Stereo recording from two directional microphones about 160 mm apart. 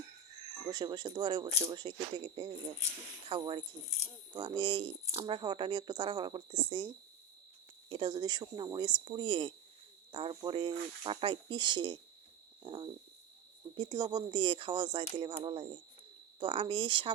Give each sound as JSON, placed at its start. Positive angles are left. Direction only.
{"t": 0.7, "sound": "speech", "side_deg": -25}